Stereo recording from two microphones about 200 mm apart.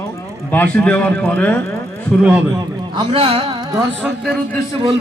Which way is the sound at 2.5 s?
25° right (ahead or behind).